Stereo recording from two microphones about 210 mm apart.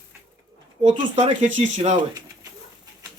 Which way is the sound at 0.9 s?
20° right (ahead or behind).